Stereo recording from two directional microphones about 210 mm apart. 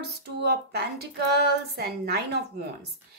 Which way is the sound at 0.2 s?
50° right (ahead or behind).